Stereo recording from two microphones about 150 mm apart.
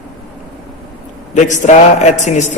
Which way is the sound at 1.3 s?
50° left (ahead or behind).